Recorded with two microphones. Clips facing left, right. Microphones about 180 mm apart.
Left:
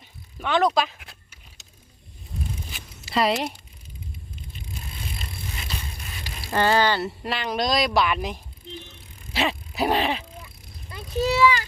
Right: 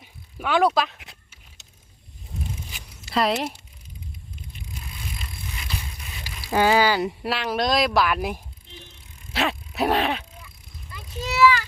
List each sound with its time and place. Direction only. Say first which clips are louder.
0.0 s mechanisms: right 1 dB; 10° right (ahead or behind)
2.7 s zipper: even; centre (ahead or behind)
6.5 s speech: right 2 dB; 10° right (ahead or behind)
9.3 s sneeze: even; centre (ahead or behind)
10.9 s vehicle: left 5 dB; 30° left (ahead or behind)